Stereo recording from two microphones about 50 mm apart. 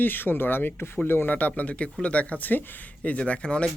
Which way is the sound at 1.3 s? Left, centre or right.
Left.